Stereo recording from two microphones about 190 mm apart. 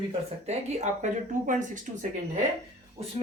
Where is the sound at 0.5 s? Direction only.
35° right (ahead or behind).